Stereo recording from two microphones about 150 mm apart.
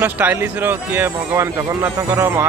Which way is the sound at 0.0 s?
10° right (ahead or behind).